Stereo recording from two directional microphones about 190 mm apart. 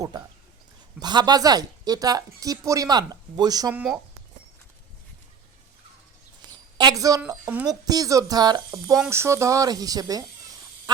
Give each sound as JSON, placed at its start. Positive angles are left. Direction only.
{"t": 0.9, "sound": "a woman's voice", "side_deg": -20}
{"t": 3.7, "sound": "speech", "side_deg": -5}
{"t": 6.7, "sound": "a woman's voice", "side_deg": -20}